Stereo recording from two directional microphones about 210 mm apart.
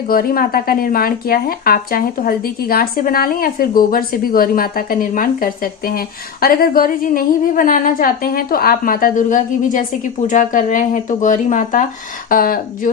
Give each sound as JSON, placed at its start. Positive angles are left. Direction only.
{"t": 0.1, "sound": "speech", "side_deg": 45}